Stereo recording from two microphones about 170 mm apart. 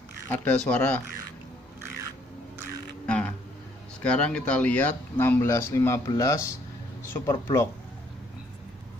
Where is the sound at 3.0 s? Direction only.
5° left (ahead or behind).